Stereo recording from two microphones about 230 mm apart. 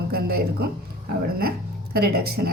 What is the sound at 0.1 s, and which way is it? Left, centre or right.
Speech, right.